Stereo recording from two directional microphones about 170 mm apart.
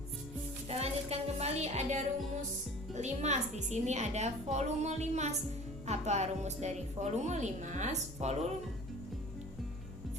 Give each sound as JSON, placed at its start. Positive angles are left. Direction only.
{"t": 0.7, "sound": "music", "side_deg": -35}
{"t": 2.9, "sound": "a woman's voice", "side_deg": -40}